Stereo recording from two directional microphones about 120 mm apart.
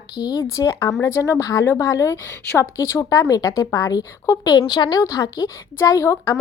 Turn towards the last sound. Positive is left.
turn(degrees=25)  # may be behind; listen again after turning